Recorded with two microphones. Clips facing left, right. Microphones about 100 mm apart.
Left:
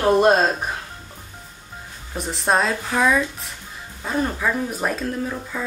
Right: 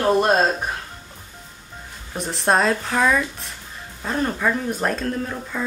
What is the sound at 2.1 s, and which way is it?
Speech, centre (ahead or behind).